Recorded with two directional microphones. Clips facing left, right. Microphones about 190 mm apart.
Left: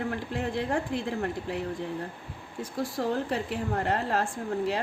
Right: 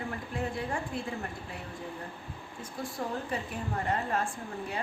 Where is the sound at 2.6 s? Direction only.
90° left.